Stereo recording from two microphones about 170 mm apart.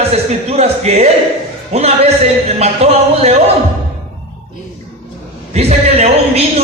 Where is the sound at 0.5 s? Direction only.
40° right (ahead or behind).